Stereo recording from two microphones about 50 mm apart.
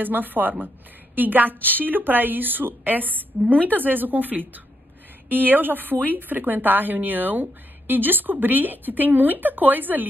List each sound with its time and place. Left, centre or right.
0.0 s speech: right